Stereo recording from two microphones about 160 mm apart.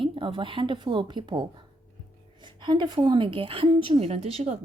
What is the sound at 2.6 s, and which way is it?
A woman's voice, 30° right (ahead or behind).